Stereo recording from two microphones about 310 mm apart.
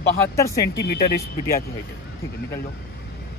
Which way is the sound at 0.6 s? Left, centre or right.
Left.